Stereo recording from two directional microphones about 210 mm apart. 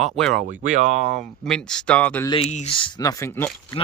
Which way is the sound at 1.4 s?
5° left (ahead or behind).